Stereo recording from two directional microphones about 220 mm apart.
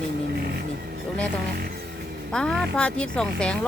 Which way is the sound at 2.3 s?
5° left (ahead or behind).